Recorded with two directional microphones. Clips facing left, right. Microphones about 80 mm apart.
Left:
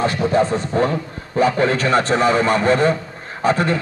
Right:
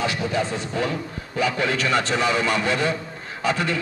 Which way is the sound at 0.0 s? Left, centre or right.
Left.